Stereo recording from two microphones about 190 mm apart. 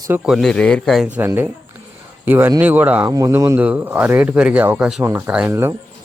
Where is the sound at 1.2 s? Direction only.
10° right (ahead or behind).